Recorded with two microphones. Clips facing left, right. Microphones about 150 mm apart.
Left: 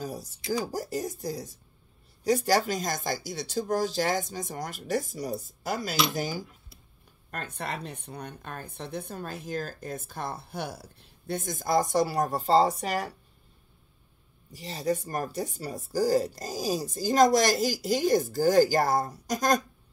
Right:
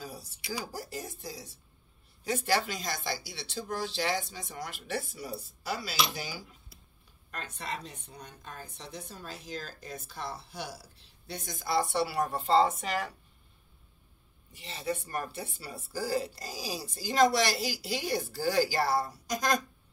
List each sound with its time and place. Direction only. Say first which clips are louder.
0.0 s a sound: left 7 dB; 45° left (ahead or behind)
0.5 s speech: left 8 dB; 45° left (ahead or behind)
14.5 s speech: left 6 dB; 40° left (ahead or behind)